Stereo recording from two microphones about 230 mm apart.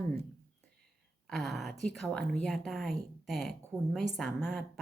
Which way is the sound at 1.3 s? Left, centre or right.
Centre.